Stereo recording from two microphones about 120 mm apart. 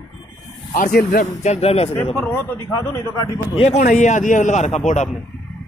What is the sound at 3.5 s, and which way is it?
Speech, 55° left (ahead or behind).